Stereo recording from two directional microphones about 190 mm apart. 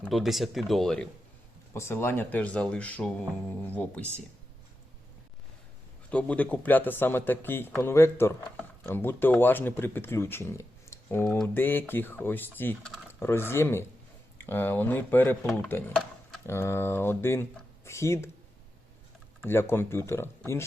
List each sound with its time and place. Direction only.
0.0 s speech: centre (ahead or behind)
1.7 s speech: 15° left (ahead or behind)
6.1 s speech: 5° left (ahead or behind)
19.5 s speech: 10° left (ahead or behind)